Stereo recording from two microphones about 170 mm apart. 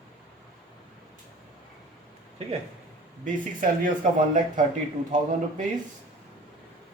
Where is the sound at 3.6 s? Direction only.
55° right (ahead or behind).